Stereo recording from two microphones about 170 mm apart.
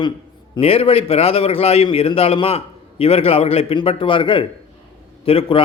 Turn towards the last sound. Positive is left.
turn(degrees=35)  # may be behind; listen again after turning